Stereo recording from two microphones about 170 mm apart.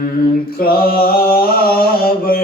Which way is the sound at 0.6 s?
60° left (ahead or behind).